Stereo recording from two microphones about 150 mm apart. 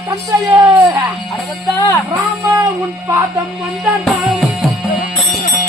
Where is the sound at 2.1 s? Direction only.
15° right (ahead or behind).